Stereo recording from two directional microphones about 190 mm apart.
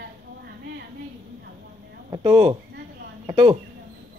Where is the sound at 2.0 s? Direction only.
25° right (ahead or behind).